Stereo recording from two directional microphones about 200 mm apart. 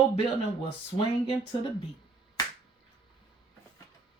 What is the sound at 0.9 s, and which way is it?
Speech, 25° left (ahead or behind).